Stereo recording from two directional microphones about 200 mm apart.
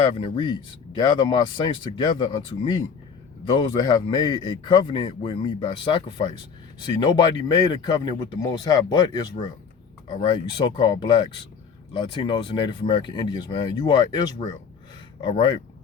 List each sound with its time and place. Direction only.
0.0 s a man's voice: 25° left (ahead or behind)